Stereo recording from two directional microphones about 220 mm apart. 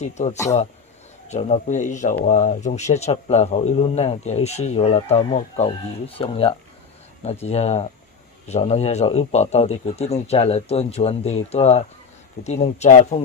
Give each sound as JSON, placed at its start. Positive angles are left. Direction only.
{"t": 0.0, "sound": "speech", "side_deg": 30}